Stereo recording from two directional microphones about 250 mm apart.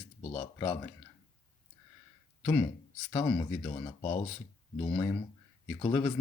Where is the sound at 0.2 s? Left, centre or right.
Left.